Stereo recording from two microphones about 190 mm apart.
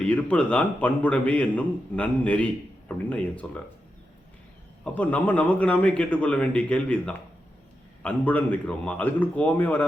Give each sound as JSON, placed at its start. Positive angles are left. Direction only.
{"t": 0.0, "sound": "a man's voice", "side_deg": 5}
{"t": 4.8, "sound": "a man's voice", "side_deg": 5}